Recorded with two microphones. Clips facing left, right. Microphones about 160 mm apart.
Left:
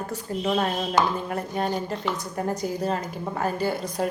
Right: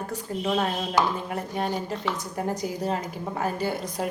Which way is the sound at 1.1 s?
15° right (ahead or behind).